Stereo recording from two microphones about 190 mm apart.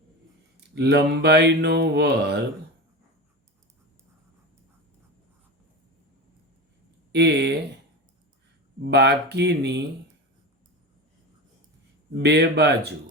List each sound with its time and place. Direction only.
0.5 s mantra: 60° right (ahead or behind)
7.1 s mantra: 65° right (ahead or behind)
8.8 s mantra: 65° right (ahead or behind)
12.1 s mantra: 65° right (ahead or behind)